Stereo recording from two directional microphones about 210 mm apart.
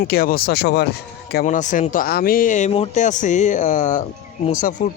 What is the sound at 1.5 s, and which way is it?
Speech, 35° left (ahead or behind).